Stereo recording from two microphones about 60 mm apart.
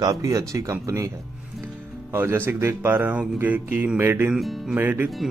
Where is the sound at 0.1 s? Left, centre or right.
Right.